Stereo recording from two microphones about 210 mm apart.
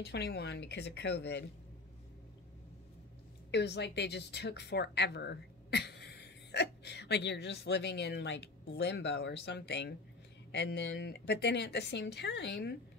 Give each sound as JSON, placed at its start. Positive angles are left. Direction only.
{"t": 0.0, "sound": "speech", "side_deg": 50}
{"t": 3.5, "sound": "speech", "side_deg": 55}